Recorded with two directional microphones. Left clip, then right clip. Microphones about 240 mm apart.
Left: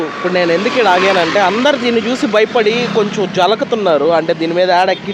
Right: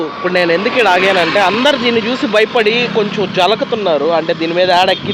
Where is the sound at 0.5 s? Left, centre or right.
Left.